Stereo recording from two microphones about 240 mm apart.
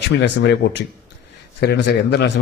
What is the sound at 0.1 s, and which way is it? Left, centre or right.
Speech, left.